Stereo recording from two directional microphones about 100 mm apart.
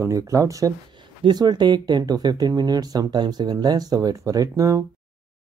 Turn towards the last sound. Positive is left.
turn(degrees=-30)  # may be behind; listen again after turning